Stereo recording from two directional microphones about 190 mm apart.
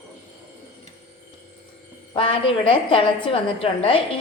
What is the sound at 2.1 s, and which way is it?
A woman's voice, 30° left (ahead or behind).